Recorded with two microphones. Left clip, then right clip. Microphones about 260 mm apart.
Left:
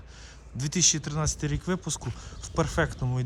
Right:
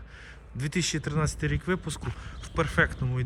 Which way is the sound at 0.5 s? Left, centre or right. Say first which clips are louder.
Left 5 dB; centre.